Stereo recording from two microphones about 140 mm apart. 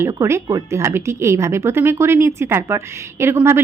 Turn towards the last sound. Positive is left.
turn(degrees=-15)  # may be behind; listen again after turning